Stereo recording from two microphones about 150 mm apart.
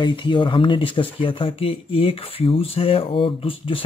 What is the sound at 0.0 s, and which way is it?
Speech, 30° left (ahead or behind).